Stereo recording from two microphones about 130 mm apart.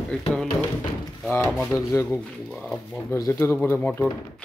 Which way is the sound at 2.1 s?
Centre (ahead or behind).